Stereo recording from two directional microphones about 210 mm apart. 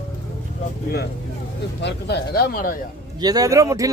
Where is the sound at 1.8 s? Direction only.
50° left (ahead or behind).